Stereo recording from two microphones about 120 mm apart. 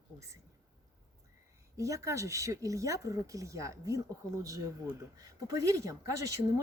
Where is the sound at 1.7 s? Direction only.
25° right (ahead or behind).